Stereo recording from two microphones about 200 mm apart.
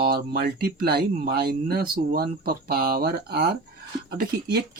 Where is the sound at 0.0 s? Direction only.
50° right (ahead or behind).